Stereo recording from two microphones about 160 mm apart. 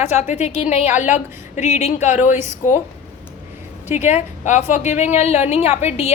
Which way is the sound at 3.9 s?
45° left (ahead or behind).